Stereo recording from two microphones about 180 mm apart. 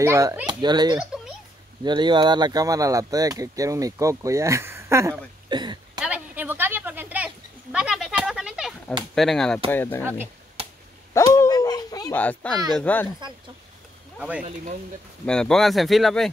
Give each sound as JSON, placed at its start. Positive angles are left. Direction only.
{"t": 0.0, "sound": "speech", "side_deg": -15}
{"t": 0.9, "sound": "a sound", "side_deg": -5}
{"t": 1.9, "sound": "speech", "side_deg": -25}
{"t": 5.9, "sound": "a sound", "side_deg": -5}
{"t": 9.1, "sound": "a child's voice", "side_deg": 0}
{"t": 11.1, "sound": "a sound", "side_deg": 15}
{"t": 12.1, "sound": "a child's voice", "side_deg": 10}
{"t": 14.4, "sound": "speech", "side_deg": -45}
{"t": 15.2, "sound": "speech", "side_deg": 5}